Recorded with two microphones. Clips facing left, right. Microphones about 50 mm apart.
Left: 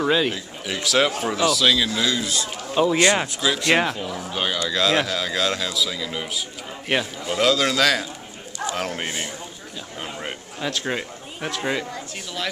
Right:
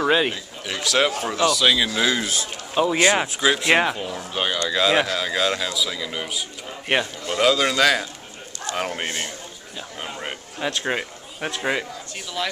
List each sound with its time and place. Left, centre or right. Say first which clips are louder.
0.0 s a man's voice: right 1 dB; centre
0.3 s speech: left 1 dB; centre
2.0 s a man's voice: right 2 dB; right
2.7 s speech: even; centre
9.9 s a sound: even; centre